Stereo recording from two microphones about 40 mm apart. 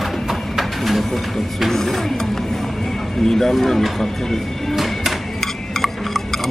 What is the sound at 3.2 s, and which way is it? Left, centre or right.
Speech, centre.